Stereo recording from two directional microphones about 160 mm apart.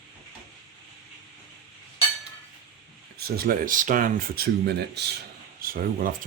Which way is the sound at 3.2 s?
75° right (ahead or behind).